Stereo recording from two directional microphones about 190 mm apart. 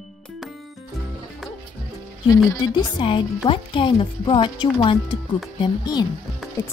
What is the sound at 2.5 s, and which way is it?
Speech, 25° left (ahead or behind).